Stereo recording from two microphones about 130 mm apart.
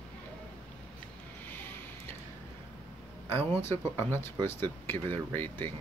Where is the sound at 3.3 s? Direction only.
20° left (ahead or behind).